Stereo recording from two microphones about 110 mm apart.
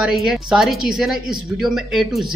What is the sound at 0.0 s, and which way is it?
Speech, 5° right (ahead or behind).